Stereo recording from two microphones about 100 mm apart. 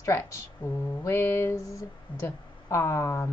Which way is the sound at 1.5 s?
35° left (ahead or behind).